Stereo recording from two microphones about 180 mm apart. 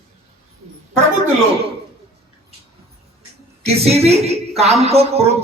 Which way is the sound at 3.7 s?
35° right (ahead or behind).